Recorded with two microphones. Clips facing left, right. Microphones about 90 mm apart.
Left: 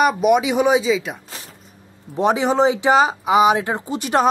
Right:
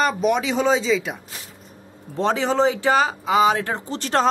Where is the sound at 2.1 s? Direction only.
15° left (ahead or behind).